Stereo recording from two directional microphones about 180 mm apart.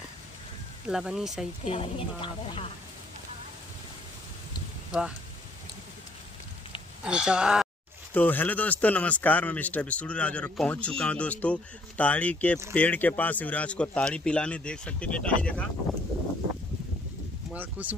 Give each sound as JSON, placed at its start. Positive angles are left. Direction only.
{"t": 0.8, "sound": "speech", "side_deg": -5}
{"t": 1.7, "sound": "a woman's voice", "side_deg": 30}
{"t": 7.1, "sound": "speech", "side_deg": -5}
{"t": 8.1, "sound": "speech", "side_deg": 10}
{"t": 17.5, "sound": "speech", "side_deg": -10}